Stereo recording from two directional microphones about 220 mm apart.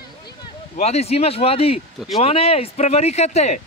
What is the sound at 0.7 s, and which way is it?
Speech, 30° left (ahead or behind).